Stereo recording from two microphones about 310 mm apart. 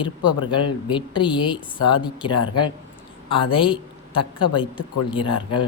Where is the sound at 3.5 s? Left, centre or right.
Centre.